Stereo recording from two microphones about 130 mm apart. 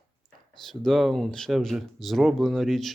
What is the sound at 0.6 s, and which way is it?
Speech, centre (ahead or behind).